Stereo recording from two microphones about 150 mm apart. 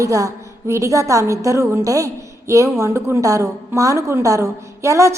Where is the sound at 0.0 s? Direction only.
20° right (ahead or behind).